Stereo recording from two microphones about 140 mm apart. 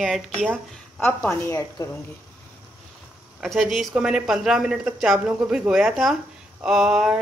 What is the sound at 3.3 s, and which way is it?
Speech, centre (ahead or behind).